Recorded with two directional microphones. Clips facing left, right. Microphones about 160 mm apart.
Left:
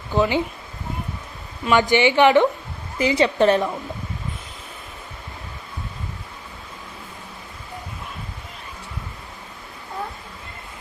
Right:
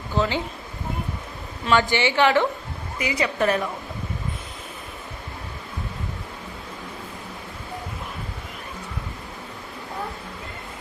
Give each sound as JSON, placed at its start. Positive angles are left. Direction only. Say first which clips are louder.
{"t": 0.2, "sound": "a woman's voice", "louder": "left 4 dB", "side_deg": 15}
{"t": 1.6, "sound": "a woman's voice", "louder": "left 4 dB", "side_deg": 15}
{"t": 3.0, "sound": "a woman's voice", "louder": "left 6 dB", "side_deg": 30}